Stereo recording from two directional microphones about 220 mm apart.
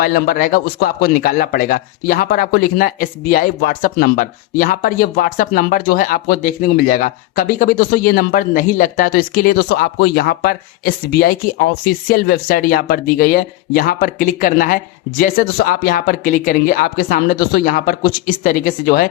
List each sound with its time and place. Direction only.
0.0 s speech: 40° left (ahead or behind)